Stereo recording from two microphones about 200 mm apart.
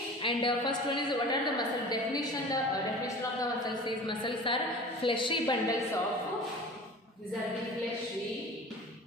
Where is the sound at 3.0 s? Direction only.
20° left (ahead or behind).